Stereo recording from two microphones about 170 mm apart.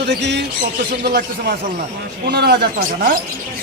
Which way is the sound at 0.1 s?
85° right.